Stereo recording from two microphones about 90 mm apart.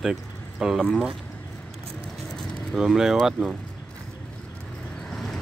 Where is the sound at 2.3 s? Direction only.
5° left (ahead or behind).